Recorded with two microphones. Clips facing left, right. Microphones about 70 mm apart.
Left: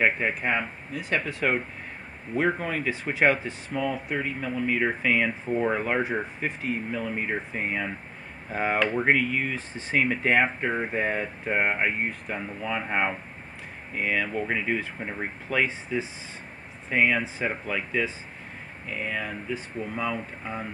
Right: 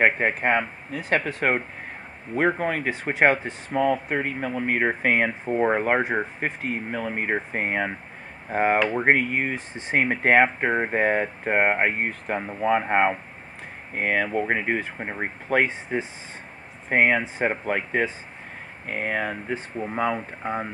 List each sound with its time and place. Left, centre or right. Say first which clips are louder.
0.0 s speech: right 4 dB; right
8.5 s speech: right 6 dB; right
8.7 s speech: right 2 dB; centre
9.0 s speech: right 3 dB; right